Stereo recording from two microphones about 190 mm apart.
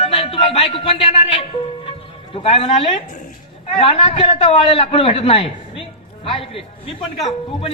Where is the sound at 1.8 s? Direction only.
30° left (ahead or behind).